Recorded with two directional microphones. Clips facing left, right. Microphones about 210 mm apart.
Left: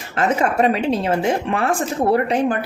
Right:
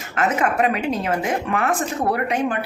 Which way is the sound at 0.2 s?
30° left (ahead or behind).